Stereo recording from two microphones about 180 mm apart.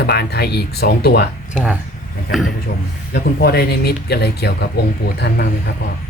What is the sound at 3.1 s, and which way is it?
Speech, 60° left (ahead or behind).